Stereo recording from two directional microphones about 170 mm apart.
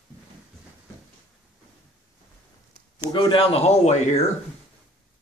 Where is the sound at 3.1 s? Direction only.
25° left (ahead or behind).